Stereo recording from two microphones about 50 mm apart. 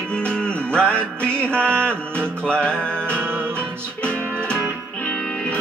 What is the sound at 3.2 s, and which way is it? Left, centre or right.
Music, right.